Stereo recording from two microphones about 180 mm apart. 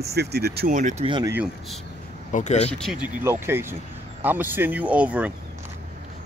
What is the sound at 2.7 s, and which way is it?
Speech, centre (ahead or behind).